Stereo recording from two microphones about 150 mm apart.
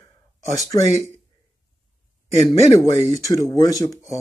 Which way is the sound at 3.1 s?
20° left (ahead or behind).